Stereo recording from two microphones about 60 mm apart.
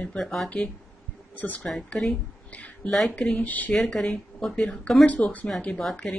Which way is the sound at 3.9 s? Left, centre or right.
Centre.